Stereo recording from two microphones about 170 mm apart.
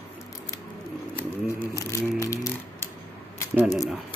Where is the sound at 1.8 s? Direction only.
20° left (ahead or behind).